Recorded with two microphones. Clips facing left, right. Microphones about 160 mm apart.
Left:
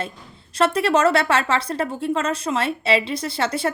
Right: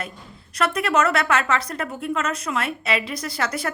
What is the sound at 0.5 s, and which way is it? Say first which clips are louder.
A woman's voice: left 3 dB; 30° left (ahead or behind).